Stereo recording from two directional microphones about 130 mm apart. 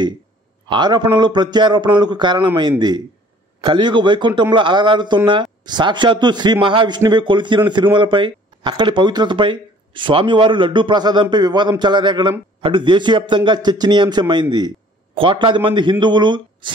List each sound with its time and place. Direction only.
0.7 s speech: 35° right (ahead or behind)